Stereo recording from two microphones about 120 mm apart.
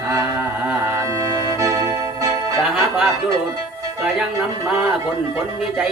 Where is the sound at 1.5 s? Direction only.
25° right (ahead or behind).